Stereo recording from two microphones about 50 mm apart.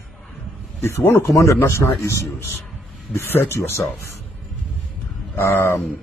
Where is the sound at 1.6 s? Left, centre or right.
Left.